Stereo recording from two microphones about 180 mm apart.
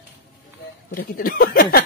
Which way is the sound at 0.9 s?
50° left (ahead or behind).